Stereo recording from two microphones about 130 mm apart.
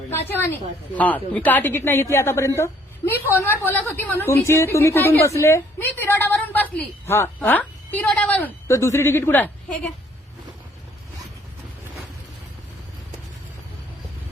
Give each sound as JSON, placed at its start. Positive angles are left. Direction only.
{"t": 0.1, "sound": "a woman's voice", "side_deg": 15}